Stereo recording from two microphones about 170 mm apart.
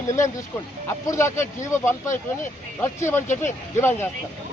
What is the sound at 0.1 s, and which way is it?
Speech, 20° left (ahead or behind).